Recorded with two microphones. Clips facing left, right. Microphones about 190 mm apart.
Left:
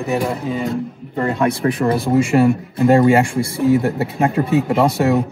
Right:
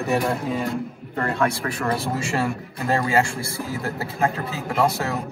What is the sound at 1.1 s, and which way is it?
Speech, 20° left (ahead or behind).